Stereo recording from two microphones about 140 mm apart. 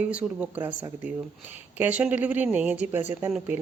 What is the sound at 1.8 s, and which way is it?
Speech, 10° right (ahead or behind).